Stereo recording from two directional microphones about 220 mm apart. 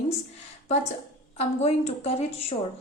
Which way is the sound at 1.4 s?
30° left (ahead or behind).